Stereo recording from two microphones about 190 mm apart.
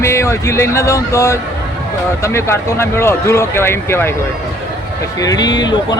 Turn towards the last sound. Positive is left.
turn(degrees=20)  # may be behind; listen again after turning